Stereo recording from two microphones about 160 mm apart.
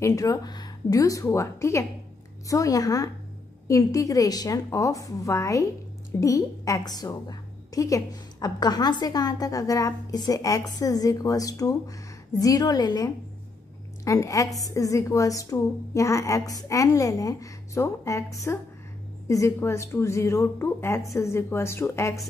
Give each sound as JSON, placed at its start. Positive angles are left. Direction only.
{"t": 0.0, "sound": "a woman's voice", "side_deg": 20}